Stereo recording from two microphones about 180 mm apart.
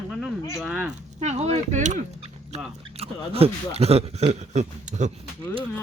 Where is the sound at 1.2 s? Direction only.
40° right (ahead or behind).